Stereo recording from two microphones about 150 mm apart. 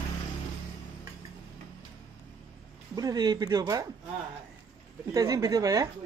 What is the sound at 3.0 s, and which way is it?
Speech, 25° right (ahead or behind).